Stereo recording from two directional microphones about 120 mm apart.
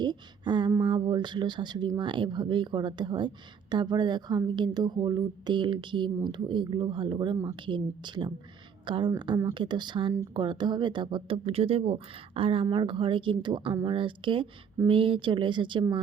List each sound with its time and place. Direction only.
0.0 s speech: 40° right (ahead or behind)
11.4 s speech: 55° right (ahead or behind)